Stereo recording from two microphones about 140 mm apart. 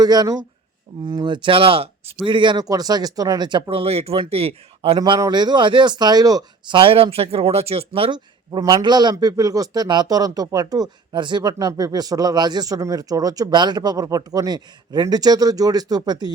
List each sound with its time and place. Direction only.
0.0 s speech: 30° right (ahead or behind); by 4.9 s 45° right (ahead or behind)
4.9 s speech: 35° right (ahead or behind)